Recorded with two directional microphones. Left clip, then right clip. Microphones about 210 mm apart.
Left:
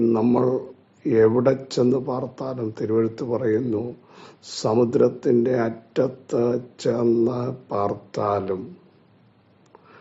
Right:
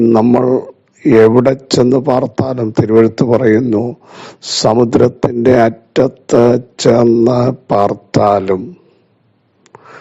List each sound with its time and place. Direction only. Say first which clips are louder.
0.0 s speech: right 10 dB; 40° right (ahead or behind)